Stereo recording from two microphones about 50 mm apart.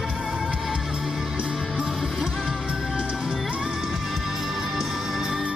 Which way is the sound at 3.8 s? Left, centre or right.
Centre.